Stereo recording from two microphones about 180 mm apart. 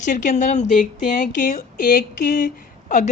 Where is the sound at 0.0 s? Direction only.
45° left (ahead or behind).